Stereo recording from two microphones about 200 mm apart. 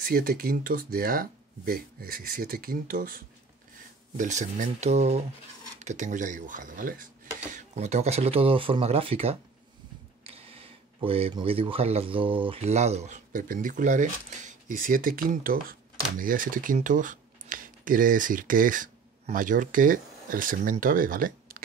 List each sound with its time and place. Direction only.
0.0 s speech: 50° right (ahead or behind)